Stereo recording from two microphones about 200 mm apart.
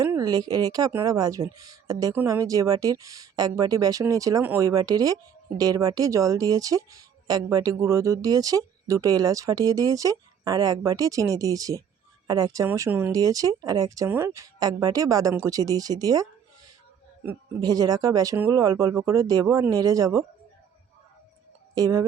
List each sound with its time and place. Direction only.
0.0 s speech: 15° right (ahead or behind)
17.6 s speech: 20° right (ahead or behind)
21.8 s speech: 15° right (ahead or behind)